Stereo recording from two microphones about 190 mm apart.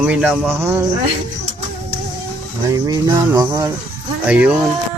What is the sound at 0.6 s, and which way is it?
Speech, 15° right (ahead or behind).